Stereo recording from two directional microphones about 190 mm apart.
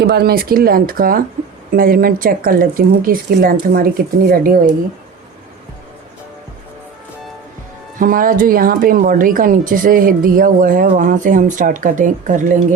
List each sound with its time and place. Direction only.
0.0 s speech: 55° right (ahead or behind)
7.9 s speech: 45° right (ahead or behind)